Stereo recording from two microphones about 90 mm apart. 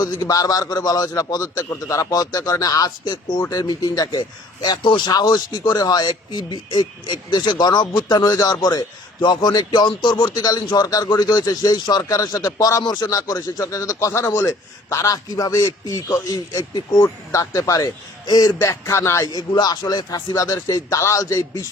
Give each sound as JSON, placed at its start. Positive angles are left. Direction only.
{"t": 0.0, "sound": "a man's voice", "side_deg": 45}
{"t": 19.3, "sound": "a man's voice", "side_deg": 50}